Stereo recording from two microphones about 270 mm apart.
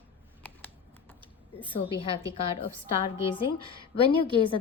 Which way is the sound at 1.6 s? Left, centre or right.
Centre.